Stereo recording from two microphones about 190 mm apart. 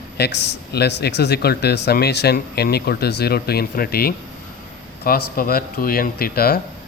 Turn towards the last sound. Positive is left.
turn(degrees=55)  # may be behind; listen again after turning